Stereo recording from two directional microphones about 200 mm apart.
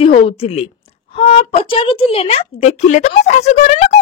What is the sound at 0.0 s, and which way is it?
A woman's voice, 30° left (ahead or behind).